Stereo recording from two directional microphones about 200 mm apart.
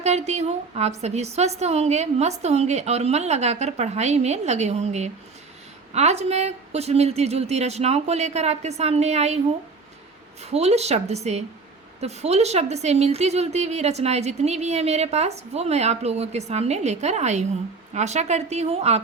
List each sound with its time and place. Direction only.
0.0 s a woman's voice: 35° right (ahead or behind)
10.4 s a woman's voice: 30° right (ahead or behind)